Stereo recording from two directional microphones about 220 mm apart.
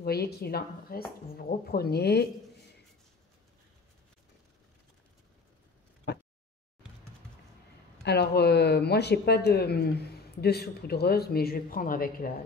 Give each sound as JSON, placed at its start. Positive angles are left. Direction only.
{"t": 0.0, "sound": "speech", "side_deg": 45}
{"t": 6.1, "sound": "a sound", "side_deg": 50}
{"t": 8.0, "sound": "speech", "side_deg": 50}